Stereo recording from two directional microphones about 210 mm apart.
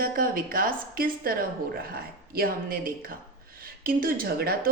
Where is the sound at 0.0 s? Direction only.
45° right (ahead or behind).